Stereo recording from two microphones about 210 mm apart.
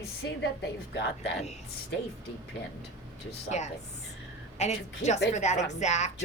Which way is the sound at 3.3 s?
30° left (ahead or behind).